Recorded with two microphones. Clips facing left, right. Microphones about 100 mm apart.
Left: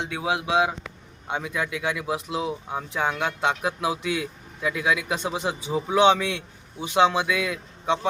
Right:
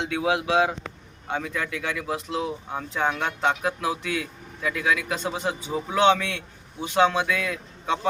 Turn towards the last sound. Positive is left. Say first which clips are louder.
# left 2 dB
turn(degrees=10)  # may be behind; listen again after turning